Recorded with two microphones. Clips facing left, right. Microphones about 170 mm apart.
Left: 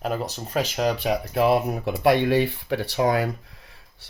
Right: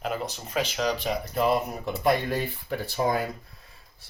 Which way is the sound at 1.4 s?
70° left (ahead or behind).